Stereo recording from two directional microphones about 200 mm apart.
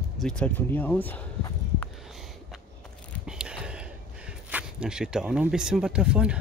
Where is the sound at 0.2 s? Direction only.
5° left (ahead or behind).